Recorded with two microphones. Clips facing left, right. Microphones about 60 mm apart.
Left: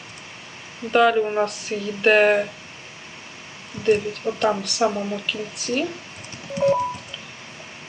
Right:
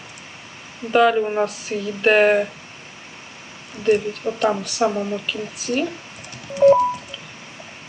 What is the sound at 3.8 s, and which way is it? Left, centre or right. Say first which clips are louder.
Speech: right 1 dB; centre.